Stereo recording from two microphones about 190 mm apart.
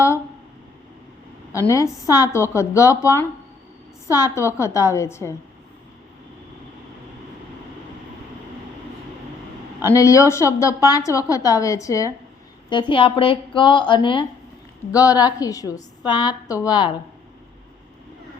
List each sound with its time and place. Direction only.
1.5 s a woman's voice: 15° left (ahead or behind)
9.9 s a woman's voice: 15° left (ahead or behind)